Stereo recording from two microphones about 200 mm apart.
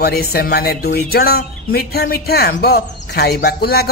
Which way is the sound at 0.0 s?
50° left (ahead or behind).